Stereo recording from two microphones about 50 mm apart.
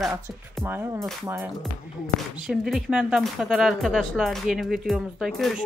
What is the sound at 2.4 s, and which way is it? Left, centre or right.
Speech, centre.